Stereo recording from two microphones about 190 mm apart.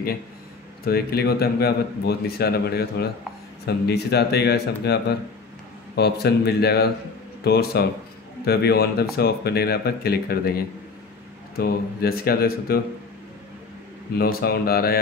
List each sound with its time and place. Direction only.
0.8 s a man's voice: 55° left (ahead or behind)
14.1 s speech: 55° left (ahead or behind)